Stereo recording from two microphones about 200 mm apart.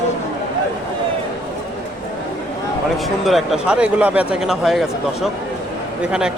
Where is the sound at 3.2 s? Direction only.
Centre (ahead or behind).